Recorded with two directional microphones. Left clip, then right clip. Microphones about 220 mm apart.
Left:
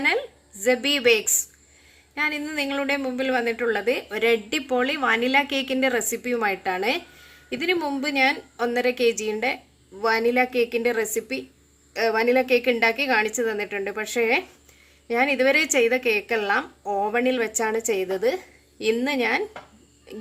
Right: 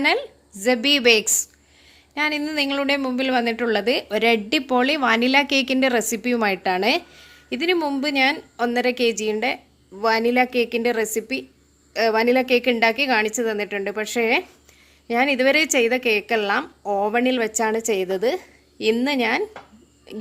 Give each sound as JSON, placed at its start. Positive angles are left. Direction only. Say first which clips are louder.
{"t": 0.0, "sound": "a woman's voice", "louder": "right 2 dB", "side_deg": -45}